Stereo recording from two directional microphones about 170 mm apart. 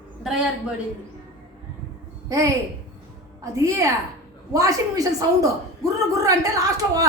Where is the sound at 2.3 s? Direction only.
20° right (ahead or behind).